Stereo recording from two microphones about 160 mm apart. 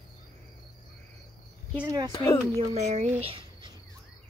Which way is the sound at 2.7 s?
45° right (ahead or behind).